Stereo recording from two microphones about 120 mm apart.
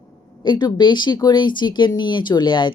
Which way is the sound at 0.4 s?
40° left (ahead or behind).